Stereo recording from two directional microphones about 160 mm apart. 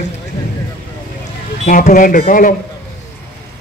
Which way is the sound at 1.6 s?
55° left (ahead or behind).